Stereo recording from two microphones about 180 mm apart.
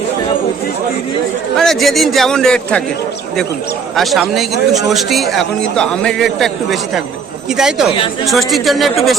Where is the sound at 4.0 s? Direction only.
Centre (ahead or behind).